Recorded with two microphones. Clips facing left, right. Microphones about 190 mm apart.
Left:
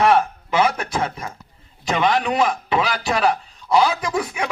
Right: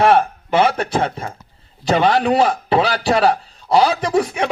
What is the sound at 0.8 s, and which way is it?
A man's voice, 30° right (ahead or behind).